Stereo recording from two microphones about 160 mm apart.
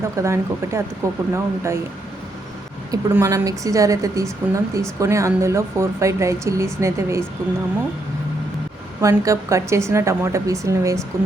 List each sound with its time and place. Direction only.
0.0 s speech: 15° right (ahead or behind)
2.9 s a woman's voice: 20° right (ahead or behind)
9.0 s a woman's voice: 20° right (ahead or behind)